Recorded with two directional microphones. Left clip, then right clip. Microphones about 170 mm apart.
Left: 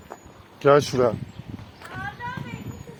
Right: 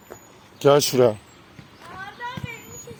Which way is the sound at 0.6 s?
50° right (ahead or behind).